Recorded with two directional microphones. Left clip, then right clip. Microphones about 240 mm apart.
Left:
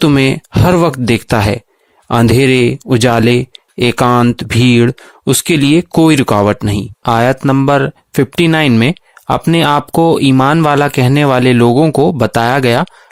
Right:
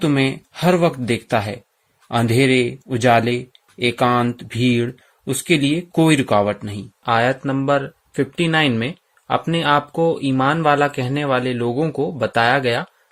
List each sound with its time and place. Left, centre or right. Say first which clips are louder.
0.0 s speech: left 8 dB; left